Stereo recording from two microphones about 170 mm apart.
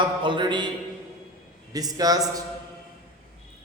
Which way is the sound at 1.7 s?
20° right (ahead or behind).